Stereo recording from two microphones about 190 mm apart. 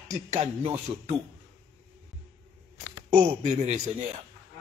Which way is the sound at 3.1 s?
35° right (ahead or behind).